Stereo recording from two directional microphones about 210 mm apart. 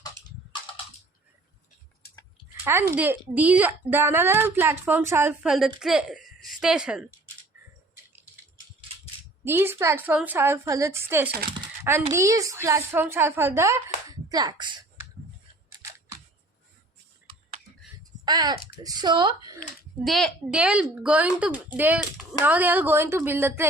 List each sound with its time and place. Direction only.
2.6 s a woman's voice: 10° right (ahead or behind)
9.4 s a woman's voice: 10° right (ahead or behind)
18.3 s speech: 20° right (ahead or behind)
20.1 s a woman's voice: centre (ahead or behind)